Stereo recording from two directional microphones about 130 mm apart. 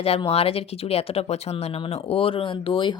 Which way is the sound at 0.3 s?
50° left (ahead or behind).